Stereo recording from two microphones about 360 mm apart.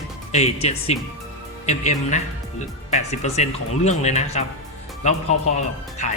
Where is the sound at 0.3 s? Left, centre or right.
Centre.